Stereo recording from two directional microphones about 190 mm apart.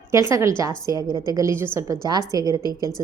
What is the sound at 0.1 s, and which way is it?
A woman's voice, 15° right (ahead or behind).